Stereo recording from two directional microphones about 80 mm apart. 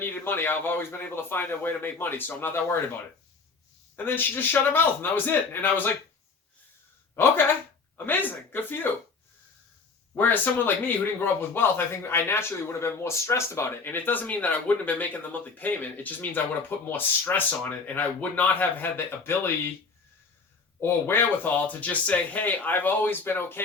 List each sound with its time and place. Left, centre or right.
0.0 s speech: left
3.9 s speech: left
7.2 s speech: left
10.2 s speech: left
20.8 s speech: left